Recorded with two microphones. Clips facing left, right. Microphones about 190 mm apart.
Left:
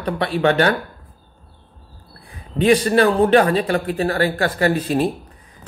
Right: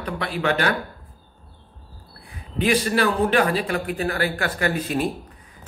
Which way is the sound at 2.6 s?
30° left (ahead or behind).